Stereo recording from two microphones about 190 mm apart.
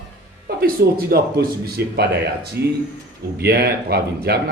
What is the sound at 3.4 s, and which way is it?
A man's voice, 55° right (ahead or behind).